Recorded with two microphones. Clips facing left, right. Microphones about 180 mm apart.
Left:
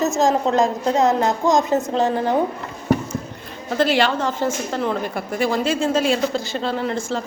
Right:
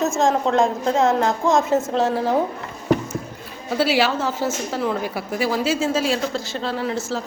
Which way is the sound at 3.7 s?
5° right (ahead or behind).